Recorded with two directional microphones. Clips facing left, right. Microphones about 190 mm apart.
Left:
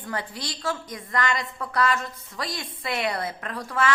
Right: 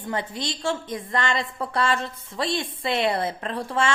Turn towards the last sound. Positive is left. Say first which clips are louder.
# right 2 dB
turn(degrees=-25)  # may be behind; listen again after turning